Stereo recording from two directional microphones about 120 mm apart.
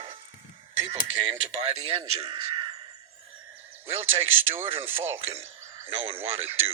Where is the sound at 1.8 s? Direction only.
50° right (ahead or behind).